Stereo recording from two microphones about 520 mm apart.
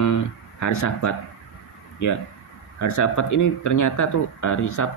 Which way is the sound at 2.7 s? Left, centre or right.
Left.